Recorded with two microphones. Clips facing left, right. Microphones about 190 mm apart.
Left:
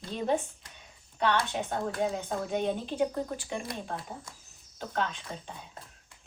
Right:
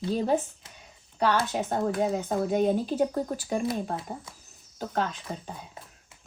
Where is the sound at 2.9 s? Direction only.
40° right (ahead or behind).